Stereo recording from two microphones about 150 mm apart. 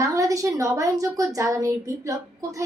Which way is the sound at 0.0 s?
20° right (ahead or behind).